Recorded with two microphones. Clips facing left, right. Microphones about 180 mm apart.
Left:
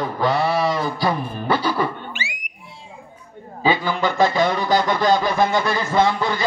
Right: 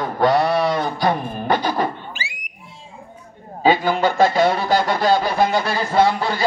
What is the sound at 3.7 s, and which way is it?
A man's voice, 45° right (ahead or behind).